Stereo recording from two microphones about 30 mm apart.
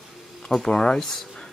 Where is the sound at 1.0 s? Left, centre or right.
Centre.